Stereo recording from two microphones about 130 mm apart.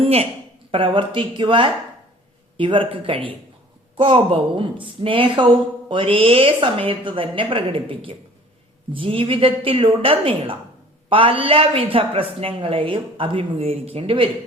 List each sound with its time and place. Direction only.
0.0 s a woman's voice: 50° right (ahead or behind)